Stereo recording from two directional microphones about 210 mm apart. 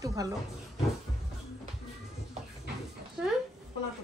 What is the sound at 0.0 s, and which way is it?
Music, 15° right (ahead or behind).